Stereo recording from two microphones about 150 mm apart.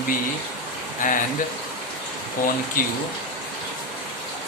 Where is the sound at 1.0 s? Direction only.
60° left (ahead or behind).